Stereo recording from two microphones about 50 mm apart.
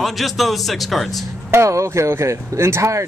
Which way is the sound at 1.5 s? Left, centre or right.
Right.